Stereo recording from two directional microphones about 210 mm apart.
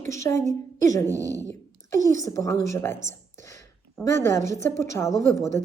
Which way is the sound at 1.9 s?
15° left (ahead or behind).